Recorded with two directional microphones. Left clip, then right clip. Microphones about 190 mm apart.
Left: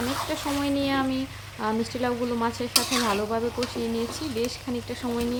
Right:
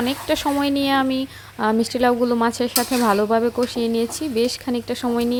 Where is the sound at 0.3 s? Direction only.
40° right (ahead or behind).